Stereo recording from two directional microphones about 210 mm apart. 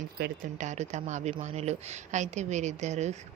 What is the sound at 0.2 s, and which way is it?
Speech, 45° right (ahead or behind).